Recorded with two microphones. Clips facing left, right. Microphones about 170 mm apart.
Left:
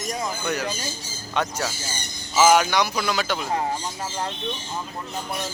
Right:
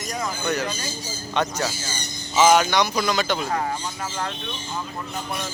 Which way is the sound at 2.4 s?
5° left (ahead or behind).